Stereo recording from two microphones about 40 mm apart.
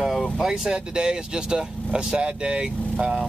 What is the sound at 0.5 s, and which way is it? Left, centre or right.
Speech, centre.